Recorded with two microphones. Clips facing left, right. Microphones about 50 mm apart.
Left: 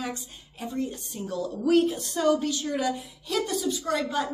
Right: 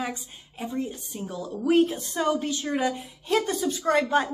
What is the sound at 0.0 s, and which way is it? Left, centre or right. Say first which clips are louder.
A woman's voice: right 2 dB; centre.